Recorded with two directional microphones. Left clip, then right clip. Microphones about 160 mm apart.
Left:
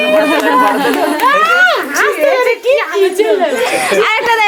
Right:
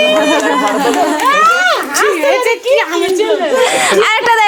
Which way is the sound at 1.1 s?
85° left.